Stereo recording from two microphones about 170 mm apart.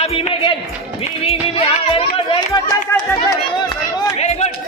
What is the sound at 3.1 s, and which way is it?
Run, 25° left (ahead or behind).